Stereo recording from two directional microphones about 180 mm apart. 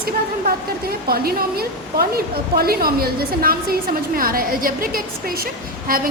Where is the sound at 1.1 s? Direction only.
60° right (ahead or behind).